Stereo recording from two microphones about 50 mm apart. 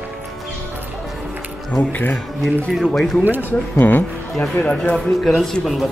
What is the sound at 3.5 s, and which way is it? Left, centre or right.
Speech, left.